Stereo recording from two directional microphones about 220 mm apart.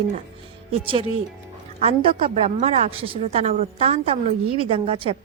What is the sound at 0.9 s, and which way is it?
A woman's voice, 25° right (ahead or behind).